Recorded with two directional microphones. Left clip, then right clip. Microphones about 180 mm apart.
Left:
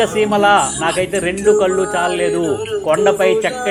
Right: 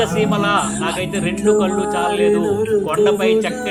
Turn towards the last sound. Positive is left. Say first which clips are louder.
# left 2 dB
turn(degrees=20)  # may be behind; listen again after turning